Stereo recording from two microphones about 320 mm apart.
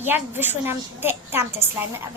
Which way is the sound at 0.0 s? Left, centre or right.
Centre.